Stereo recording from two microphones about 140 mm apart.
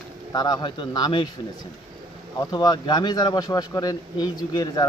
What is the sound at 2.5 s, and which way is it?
Speech, 30° left (ahead or behind).